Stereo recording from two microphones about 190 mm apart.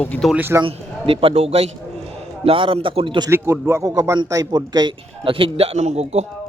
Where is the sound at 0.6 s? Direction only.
30° right (ahead or behind).